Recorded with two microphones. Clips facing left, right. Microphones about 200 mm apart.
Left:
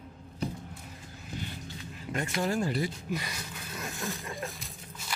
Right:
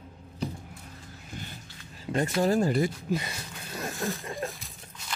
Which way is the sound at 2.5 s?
45° right (ahead or behind).